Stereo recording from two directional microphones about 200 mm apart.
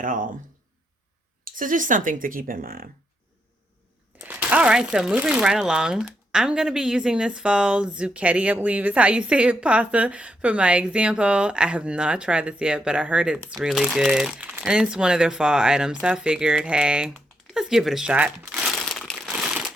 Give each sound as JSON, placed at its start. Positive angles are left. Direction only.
{"t": 0.0, "sound": "a sound", "side_deg": -40}
{"t": 1.5, "sound": "speech", "side_deg": -40}
{"t": 4.2, "sound": "speech", "side_deg": -10}